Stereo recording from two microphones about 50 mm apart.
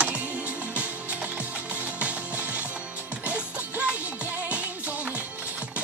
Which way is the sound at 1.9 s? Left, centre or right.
Right.